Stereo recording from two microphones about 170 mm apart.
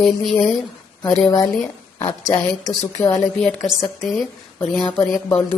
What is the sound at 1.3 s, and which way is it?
Speech, 20° left (ahead or behind).